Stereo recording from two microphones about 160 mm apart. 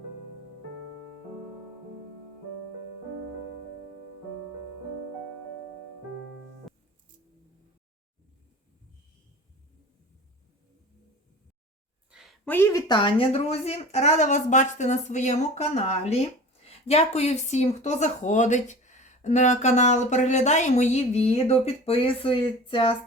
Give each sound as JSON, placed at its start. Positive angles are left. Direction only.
{"t": 12.5, "sound": "speech", "side_deg": 15}
{"t": 12.9, "sound": "speech", "side_deg": 30}